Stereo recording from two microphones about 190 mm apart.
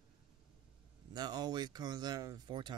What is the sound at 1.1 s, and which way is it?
Speech, 20° right (ahead or behind).